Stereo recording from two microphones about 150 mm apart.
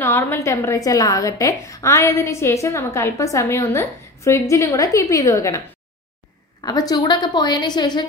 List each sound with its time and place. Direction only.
0.0 s a woman's voice: 15° left (ahead or behind)
6.6 s a woman's voice: 25° left (ahead or behind)